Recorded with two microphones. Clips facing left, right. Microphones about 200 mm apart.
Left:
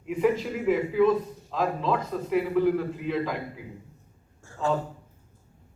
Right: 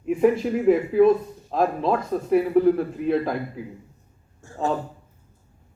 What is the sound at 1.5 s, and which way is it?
Speech, 50° right (ahead or behind).